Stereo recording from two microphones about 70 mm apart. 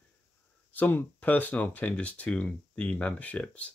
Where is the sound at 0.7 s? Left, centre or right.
Left.